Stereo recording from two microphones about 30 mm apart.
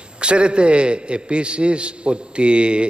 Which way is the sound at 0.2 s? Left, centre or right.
Right.